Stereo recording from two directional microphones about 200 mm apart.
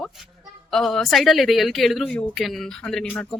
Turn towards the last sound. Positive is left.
turn(degrees=5)  # may be behind; listen again after turning